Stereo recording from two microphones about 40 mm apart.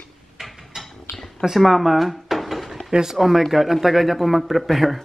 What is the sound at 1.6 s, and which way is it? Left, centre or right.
Dishes, centre.